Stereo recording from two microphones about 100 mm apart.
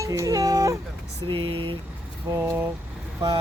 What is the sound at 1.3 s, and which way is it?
Speech, 55° right (ahead or behind).